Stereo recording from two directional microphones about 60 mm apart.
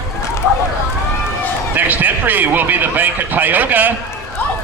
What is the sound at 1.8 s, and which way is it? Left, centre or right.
A man's voice, right.